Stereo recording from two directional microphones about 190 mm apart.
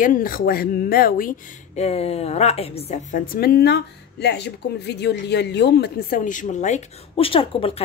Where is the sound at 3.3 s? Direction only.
55° left (ahead or behind); by 7.8 s 30° left (ahead or behind).